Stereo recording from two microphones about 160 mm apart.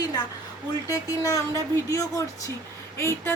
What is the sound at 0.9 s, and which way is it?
A man's voice, 20° left (ahead or behind).